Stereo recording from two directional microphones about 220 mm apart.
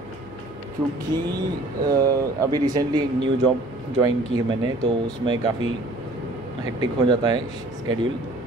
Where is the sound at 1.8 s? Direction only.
15° right (ahead or behind).